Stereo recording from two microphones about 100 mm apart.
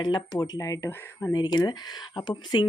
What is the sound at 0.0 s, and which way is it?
A woman's voice, 45° left (ahead or behind).